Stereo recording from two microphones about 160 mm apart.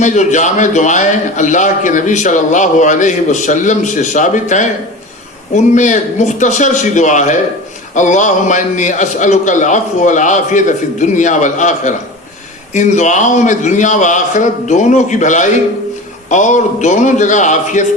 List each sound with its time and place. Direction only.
0.0 s a man's voice: 50° left (ahead or behind)